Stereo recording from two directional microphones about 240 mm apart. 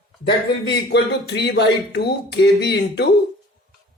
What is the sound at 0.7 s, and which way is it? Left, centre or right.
Speech, left.